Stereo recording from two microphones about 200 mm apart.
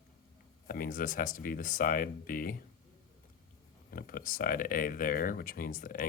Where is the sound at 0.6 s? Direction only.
45° left (ahead or behind).